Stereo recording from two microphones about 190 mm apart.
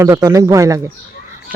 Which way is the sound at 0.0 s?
15° right (ahead or behind).